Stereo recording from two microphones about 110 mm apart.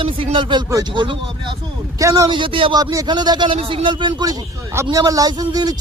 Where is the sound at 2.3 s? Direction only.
50° right (ahead or behind).